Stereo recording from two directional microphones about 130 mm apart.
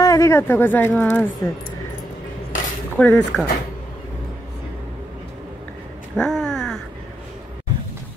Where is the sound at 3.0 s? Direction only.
10° left (ahead or behind).